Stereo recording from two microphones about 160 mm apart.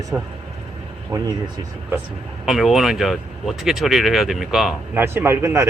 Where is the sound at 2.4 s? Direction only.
Centre (ahead or behind).